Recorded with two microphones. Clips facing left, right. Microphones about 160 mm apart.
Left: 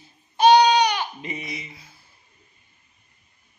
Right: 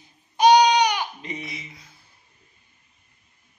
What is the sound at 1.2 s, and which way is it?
Speech, 5° left (ahead or behind).